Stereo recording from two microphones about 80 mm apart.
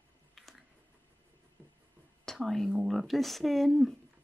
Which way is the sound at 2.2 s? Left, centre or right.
Centre.